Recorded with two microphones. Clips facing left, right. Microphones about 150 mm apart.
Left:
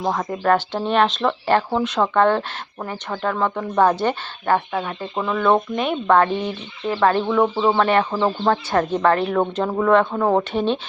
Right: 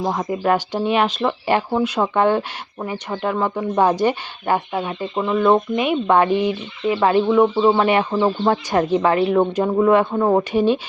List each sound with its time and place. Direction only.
0.0 s speech: 10° right (ahead or behind)